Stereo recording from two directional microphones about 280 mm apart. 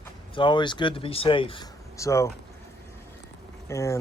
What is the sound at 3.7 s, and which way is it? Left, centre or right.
Speech, centre.